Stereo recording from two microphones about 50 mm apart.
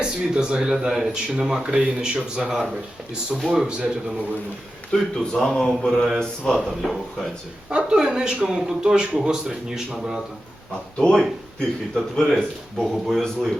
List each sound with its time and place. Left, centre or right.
0.0 s speech: centre
3.4 s speech: centre
3.7 s speech: centre
4.9 s speech: centre
7.7 s speech: right
11.0 s speech: centre
11.9 s speech: centre